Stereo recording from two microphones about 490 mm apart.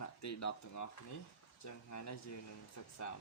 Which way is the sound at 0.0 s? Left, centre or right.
Left.